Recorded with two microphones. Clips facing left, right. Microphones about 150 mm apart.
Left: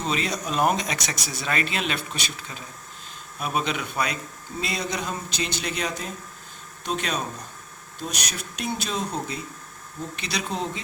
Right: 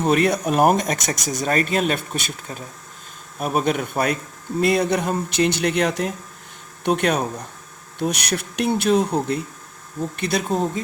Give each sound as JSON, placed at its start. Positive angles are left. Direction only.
{"t": 0.0, "sound": "speech", "side_deg": -60}